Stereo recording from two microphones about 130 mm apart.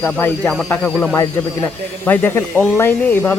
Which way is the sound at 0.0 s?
15° left (ahead or behind).